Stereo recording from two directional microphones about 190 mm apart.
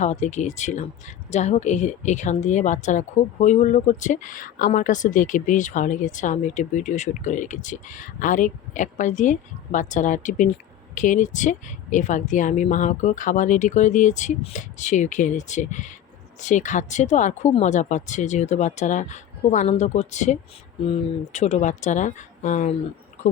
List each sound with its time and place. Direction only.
0.0 s a woman's voice: 40° left (ahead or behind)